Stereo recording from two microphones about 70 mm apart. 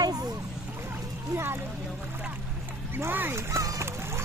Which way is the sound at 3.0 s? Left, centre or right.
Right.